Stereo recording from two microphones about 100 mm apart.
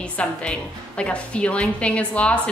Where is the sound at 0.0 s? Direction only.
10° left (ahead or behind).